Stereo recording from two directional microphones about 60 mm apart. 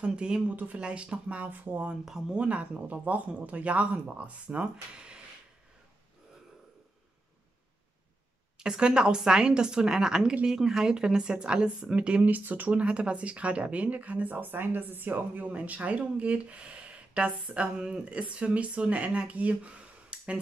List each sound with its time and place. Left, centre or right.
0.0 s a woman's voice: centre
1.9 s a woman's voice: centre
2.3 s a woman's voice: right
8.5 s a woman's voice: centre